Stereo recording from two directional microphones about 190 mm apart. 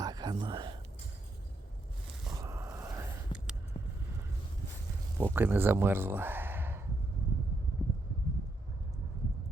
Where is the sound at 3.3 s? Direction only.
25° left (ahead or behind).